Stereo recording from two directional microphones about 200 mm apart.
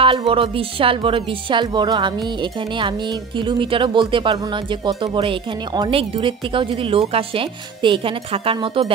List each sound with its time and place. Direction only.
0.0 s speech: 25° right (ahead or behind)